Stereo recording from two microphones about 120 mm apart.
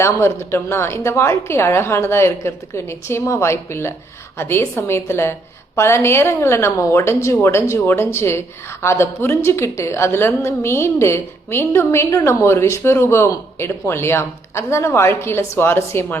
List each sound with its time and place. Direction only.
0.0 s a woman's voice: 20° left (ahead or behind)